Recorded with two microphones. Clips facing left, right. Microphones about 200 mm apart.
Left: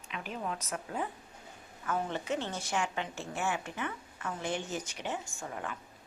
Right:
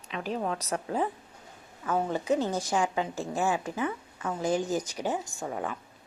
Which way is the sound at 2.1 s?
40° right (ahead or behind).